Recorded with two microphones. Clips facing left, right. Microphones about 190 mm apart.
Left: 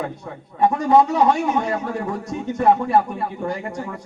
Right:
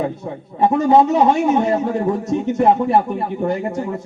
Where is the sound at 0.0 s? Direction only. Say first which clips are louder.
Right 6 dB; 25° right (ahead or behind).